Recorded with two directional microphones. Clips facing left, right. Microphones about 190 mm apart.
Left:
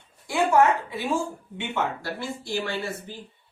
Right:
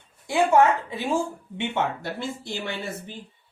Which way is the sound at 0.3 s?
20° right (ahead or behind).